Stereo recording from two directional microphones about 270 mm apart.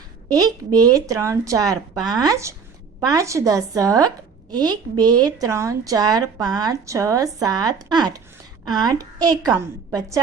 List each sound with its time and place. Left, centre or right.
0.3 s speech: centre